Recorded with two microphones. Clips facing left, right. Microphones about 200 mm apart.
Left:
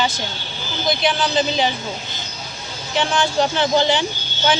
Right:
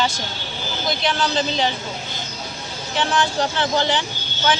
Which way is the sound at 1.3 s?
10° left (ahead or behind).